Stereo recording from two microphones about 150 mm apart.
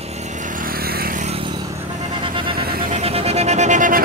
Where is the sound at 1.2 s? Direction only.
35° right (ahead or behind).